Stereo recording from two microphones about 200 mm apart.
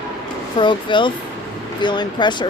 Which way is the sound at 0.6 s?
25° left (ahead or behind).